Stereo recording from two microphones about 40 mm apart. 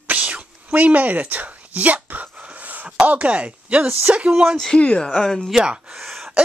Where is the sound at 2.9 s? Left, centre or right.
Right.